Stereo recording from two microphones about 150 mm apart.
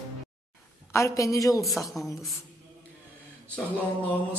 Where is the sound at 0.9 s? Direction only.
20° left (ahead or behind).